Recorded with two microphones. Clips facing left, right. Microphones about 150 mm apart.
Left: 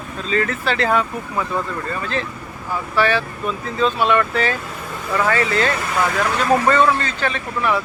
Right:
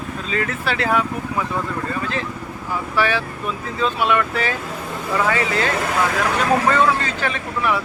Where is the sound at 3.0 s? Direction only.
10° right (ahead or behind).